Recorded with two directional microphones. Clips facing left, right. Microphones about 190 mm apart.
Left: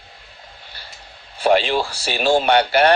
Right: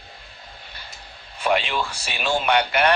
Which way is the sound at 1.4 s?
35° left (ahead or behind).